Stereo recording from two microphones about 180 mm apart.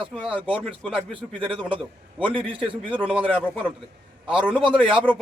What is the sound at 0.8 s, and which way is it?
Speech, centre (ahead or behind).